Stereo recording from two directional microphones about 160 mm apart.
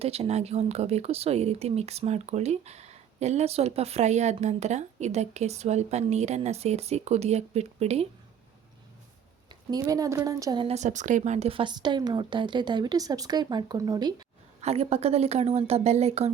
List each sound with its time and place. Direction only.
0.0 s speech: 40° right (ahead or behind)
9.5 s a woman's voice: 25° right (ahead or behind)
10.7 s a woman's voice: 50° right (ahead or behind); by 14.3 s 25° right (ahead or behind)
14.6 s a woman's voice: 40° right (ahead or behind)